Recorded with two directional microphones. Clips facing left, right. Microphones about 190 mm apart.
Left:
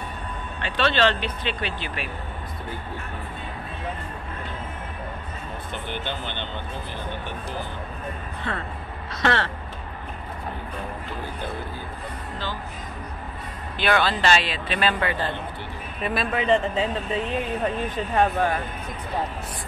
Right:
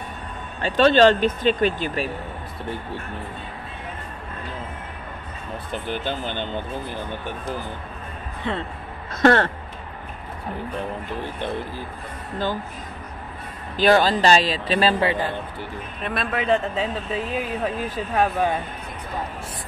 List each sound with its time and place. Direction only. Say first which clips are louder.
0.6 s speech: right 7 dB; 40° right (ahead or behind)
5.7 s speech: right 5 dB; 40° right (ahead or behind)
8.5 s speech: right 4 dB; 20° right (ahead or behind)
9.1 s speech: right 7 dB; 50° right (ahead or behind)
11.2 s speech: right 4 dB; 30° right (ahead or behind)
13.7 s speech: right 5 dB; 40° right (ahead or behind)
16.0 s speech: left 1 dB; centre (ahead or behind)